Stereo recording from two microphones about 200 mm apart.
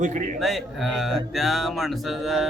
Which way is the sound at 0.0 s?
40° right (ahead or behind).